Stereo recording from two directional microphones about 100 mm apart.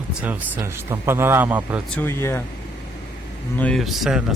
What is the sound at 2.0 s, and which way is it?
Speech, 25° left (ahead or behind).